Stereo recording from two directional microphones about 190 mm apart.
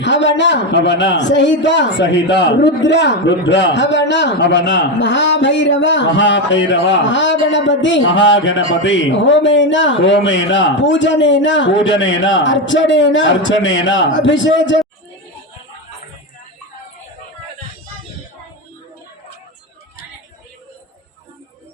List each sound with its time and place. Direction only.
0.0 s a man's voice: 70° left (ahead or behind)